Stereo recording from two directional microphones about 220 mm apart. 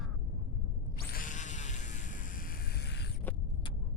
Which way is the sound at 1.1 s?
35° left (ahead or behind).